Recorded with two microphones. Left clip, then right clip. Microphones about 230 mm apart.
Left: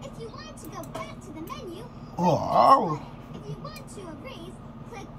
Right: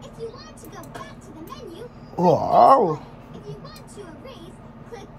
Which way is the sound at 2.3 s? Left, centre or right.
Left.